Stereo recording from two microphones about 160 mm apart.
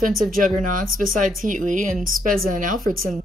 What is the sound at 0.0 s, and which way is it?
Speech, centre (ahead or behind).